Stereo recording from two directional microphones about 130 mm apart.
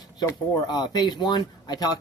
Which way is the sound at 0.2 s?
30° left (ahead or behind).